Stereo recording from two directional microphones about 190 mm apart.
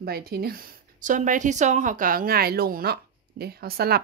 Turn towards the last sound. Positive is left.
turn(degrees=-55)  # may be behind; listen again after turning